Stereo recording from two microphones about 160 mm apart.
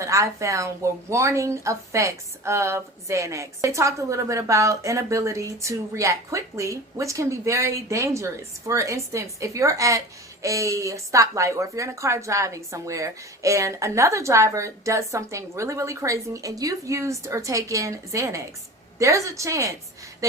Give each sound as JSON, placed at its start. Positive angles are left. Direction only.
{"t": 0.0, "sound": "speech", "side_deg": -20}